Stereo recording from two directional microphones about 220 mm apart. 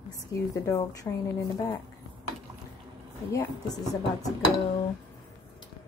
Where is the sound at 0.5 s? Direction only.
15° left (ahead or behind).